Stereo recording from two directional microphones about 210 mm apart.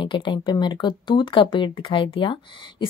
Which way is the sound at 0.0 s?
20° left (ahead or behind).